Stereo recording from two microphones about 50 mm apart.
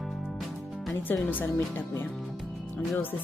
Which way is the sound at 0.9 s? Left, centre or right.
Left.